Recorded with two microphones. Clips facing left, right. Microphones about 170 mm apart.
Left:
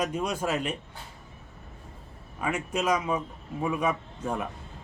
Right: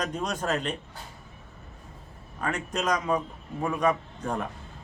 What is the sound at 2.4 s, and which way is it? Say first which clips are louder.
A man's voice: left 1 dB; 10° left (ahead or behind).